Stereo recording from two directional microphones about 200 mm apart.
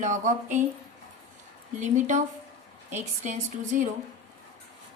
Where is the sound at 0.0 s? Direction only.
35° right (ahead or behind).